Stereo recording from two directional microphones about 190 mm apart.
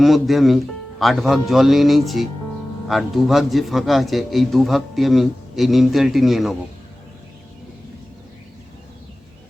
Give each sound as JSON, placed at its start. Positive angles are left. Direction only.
{"t": 0.0, "sound": "a man's voice", "side_deg": 0}